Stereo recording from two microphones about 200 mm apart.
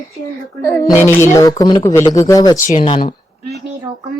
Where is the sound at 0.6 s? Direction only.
15° left (ahead or behind).